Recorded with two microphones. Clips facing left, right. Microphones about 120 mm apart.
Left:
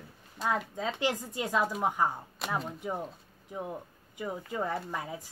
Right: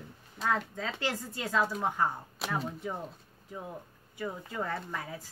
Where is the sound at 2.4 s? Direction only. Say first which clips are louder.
Left 1 dB; 5° right (ahead or behind).